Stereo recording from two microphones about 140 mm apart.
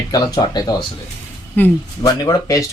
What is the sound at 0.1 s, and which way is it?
Speech, 30° left (ahead or behind).